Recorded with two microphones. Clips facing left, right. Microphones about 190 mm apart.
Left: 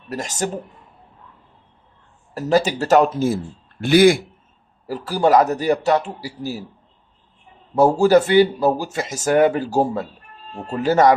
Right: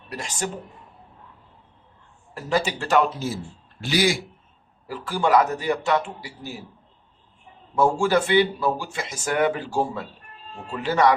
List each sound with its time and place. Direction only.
0.1 s speech: 40° left (ahead or behind)
2.3 s a man's voice: 40° left (ahead or behind)
4.9 s speech: 40° left (ahead or behind)
7.8 s a man's voice: 40° left (ahead or behind)